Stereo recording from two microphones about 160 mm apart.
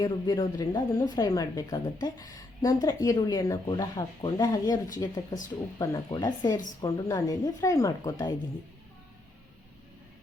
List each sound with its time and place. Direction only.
0.0 s speech: 25° left (ahead or behind)